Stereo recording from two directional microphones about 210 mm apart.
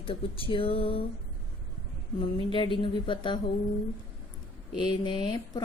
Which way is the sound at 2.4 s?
25° left (ahead or behind).